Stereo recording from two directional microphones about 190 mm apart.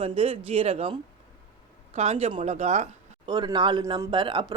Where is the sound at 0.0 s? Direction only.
30° right (ahead or behind).